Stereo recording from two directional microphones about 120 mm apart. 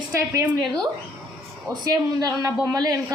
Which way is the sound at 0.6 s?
35° right (ahead or behind).